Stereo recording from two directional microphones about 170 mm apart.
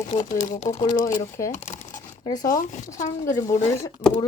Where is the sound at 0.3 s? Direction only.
45° left (ahead or behind).